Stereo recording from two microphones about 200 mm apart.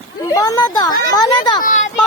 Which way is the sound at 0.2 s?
15° left (ahead or behind).